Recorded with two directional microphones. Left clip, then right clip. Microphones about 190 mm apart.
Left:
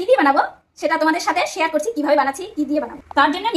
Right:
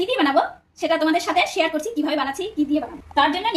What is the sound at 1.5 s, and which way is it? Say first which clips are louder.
Speech: left 2 dB; 15° left (ahead or behind).